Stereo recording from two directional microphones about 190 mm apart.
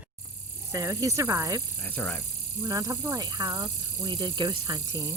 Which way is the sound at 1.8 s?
10° left (ahead or behind).